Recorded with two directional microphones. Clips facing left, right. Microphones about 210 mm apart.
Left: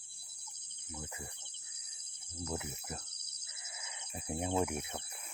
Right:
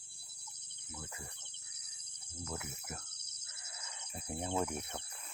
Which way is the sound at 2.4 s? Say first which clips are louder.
Left 4 dB; 20° left (ahead or behind).